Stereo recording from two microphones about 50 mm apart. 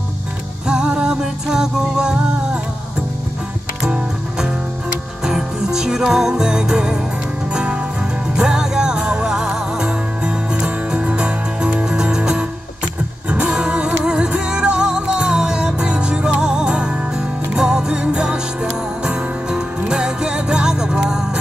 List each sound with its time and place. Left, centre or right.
0.7 s music: centre
3.8 s music: centre